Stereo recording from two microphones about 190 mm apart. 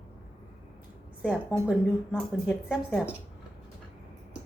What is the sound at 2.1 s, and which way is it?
Speech, centre (ahead or behind).